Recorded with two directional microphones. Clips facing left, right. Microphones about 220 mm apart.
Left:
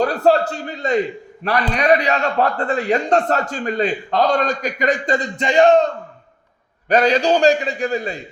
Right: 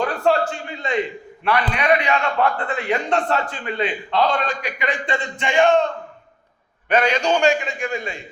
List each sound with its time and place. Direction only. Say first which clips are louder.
0.0 s a man's voice: left 4 dB; 40° left (ahead or behind)